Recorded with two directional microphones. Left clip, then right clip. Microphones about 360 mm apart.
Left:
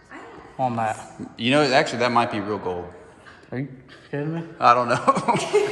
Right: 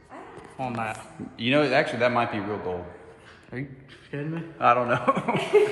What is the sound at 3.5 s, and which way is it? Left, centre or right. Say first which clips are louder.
Speech: left 5 dB; left.